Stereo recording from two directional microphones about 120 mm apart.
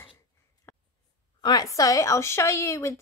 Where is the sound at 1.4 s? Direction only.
35° left (ahead or behind).